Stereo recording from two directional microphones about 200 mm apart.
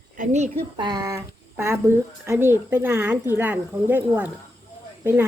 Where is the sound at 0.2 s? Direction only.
35° right (ahead or behind).